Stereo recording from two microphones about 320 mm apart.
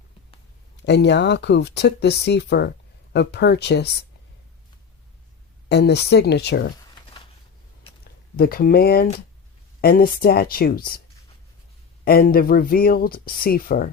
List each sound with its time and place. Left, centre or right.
0.9 s speech: left
5.6 s speech: left
8.0 s speech: left
12.0 s speech: left